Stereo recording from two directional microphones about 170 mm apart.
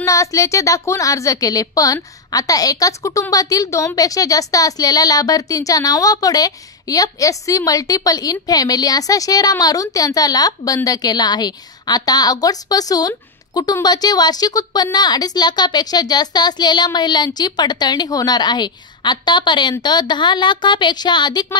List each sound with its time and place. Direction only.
0.0 s a woman's voice: 20° left (ahead or behind)